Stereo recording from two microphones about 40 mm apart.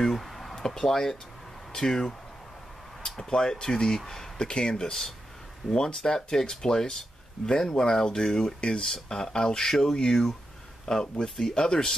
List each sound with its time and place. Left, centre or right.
0.0 s a sound: centre
1.7 s speech: centre
3.3 s speech: centre
4.5 s speech: left